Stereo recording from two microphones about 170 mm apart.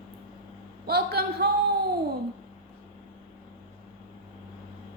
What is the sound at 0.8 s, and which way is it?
Speech, 65° right (ahead or behind).